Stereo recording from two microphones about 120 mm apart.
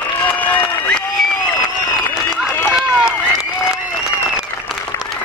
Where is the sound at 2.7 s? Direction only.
5° right (ahead or behind).